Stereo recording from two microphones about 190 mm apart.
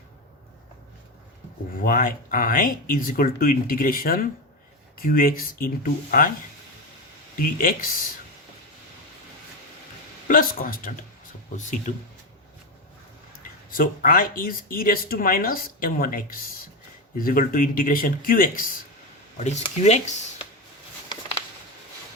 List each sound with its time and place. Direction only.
1.7 s speech: 45° left (ahead or behind)
7.3 s speech: 45° left (ahead or behind)
10.2 s speech: 45° left (ahead or behind)
13.7 s speech: 50° left (ahead or behind)
19.4 s speech: 35° left (ahead or behind)